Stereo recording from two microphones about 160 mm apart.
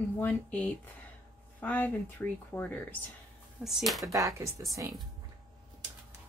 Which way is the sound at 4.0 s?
20° right (ahead or behind).